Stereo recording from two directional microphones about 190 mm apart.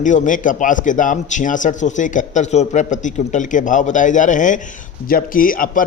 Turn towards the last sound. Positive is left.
turn(degrees=45)  # may be behind; listen again after turning